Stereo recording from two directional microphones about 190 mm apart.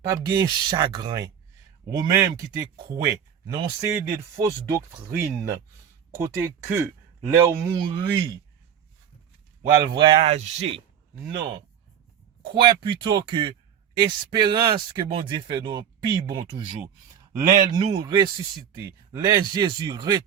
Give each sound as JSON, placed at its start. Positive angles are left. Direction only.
{"t": 0.0, "sound": "a man's voice", "side_deg": -20}
{"t": 6.1, "sound": "a man's voice", "side_deg": -15}
{"t": 9.6, "sound": "speech", "side_deg": -20}